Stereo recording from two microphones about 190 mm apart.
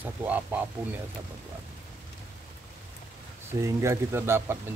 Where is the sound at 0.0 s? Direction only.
10° right (ahead or behind).